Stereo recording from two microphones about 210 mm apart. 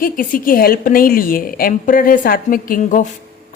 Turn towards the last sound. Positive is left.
turn(degrees=40)  # may be behind; listen again after turning